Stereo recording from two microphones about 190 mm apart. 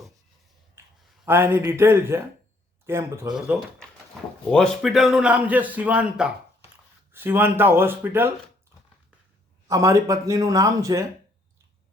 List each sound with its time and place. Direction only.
1.2 s speech: 10° right (ahead or behind)
3.3 s a man's voice: centre (ahead or behind)
9.6 s speech: 15° right (ahead or behind)